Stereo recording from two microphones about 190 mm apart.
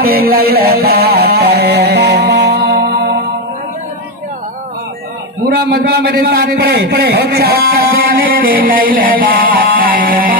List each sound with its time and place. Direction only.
0.0 s a sound: 50° right (ahead or behind)
5.6 s a man's voice: 55° right (ahead or behind)
8.2 s music: 50° right (ahead or behind)